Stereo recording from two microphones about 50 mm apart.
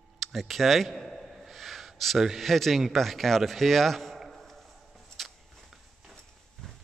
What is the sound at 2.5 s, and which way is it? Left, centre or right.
A man's voice, centre.